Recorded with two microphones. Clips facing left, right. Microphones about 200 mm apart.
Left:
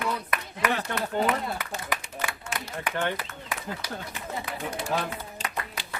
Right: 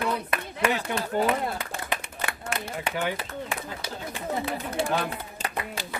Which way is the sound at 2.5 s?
60° right (ahead or behind).